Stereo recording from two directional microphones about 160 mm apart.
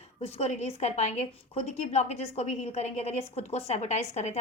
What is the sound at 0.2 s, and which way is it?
A woman's voice, 40° left (ahead or behind).